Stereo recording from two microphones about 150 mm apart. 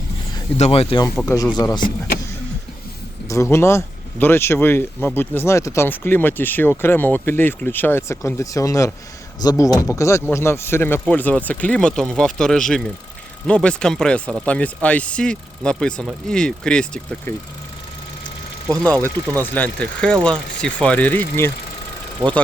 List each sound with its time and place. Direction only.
0.5 s speech: 45° left (ahead or behind)
1.2 s speech: 20° left (ahead or behind)
3.2 s speech: 20° left (ahead or behind)
19.4 s speech: 10° left (ahead or behind)